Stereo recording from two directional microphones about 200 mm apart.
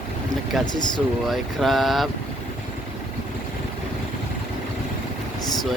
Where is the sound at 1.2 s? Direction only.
Centre (ahead or behind).